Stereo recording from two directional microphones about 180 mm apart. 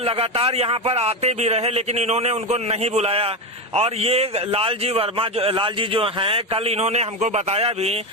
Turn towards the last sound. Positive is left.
turn(degrees=-35)  # may be behind; listen again after turning